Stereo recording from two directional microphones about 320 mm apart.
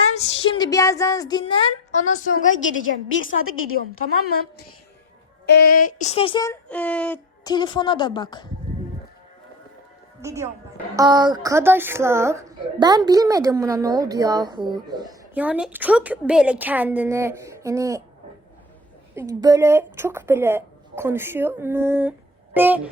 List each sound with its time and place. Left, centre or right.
0.1 s a woman's voice: centre
2.3 s a woman's voice: left
5.5 s speech: left
10.2 s a woman's voice: centre
19.1 s a woman's voice: centre